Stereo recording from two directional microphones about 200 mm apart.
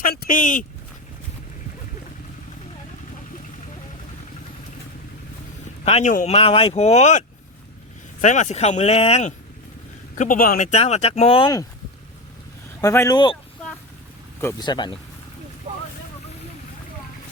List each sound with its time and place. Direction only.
0.0 s speech: 45° left (ahead or behind)
5.8 s speech: 35° left (ahead or behind)
10.2 s speech: 45° left (ahead or behind); by 11.6 s 25° left (ahead or behind)
12.8 s speech: 15° left (ahead or behind)
14.6 s speech: 20° left (ahead or behind)